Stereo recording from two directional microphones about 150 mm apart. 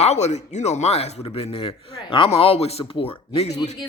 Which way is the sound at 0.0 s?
45° left (ahead or behind).